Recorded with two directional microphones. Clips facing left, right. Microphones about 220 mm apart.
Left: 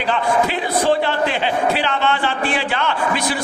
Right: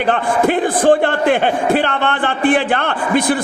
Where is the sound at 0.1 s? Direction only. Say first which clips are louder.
Right 3 dB; 50° right (ahead or behind).